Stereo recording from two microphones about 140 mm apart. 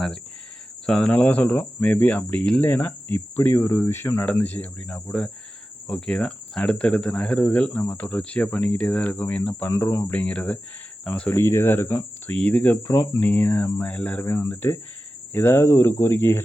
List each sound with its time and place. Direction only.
0.9 s speech: 5° left (ahead or behind)